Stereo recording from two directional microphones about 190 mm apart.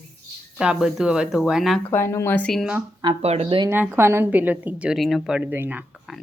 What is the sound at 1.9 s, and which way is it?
Speech, 15° left (ahead or behind).